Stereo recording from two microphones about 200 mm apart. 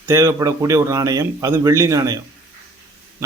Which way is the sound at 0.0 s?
15° right (ahead or behind).